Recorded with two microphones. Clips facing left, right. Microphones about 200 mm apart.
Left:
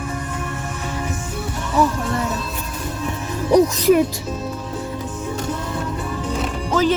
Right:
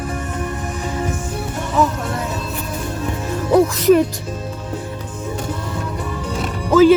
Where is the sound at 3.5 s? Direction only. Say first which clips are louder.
Right 1 dB; 20° left (ahead or behind).